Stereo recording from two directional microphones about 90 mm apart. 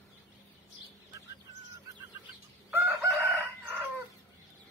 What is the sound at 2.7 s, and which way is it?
Chicken, 20° right (ahead or behind).